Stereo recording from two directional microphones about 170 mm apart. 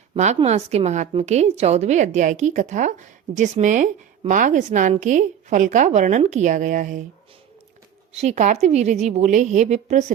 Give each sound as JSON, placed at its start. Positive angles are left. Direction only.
{"t": 0.1, "sound": "a woman's voice", "side_deg": -40}
{"t": 8.1, "sound": "a woman's voice", "side_deg": -40}